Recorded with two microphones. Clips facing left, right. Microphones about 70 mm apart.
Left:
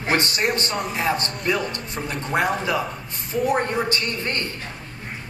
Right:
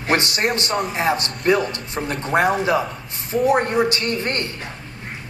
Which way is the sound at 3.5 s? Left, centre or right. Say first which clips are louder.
Right 5 dB; centre.